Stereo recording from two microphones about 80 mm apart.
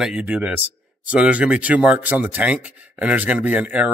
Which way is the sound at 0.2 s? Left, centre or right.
Centre.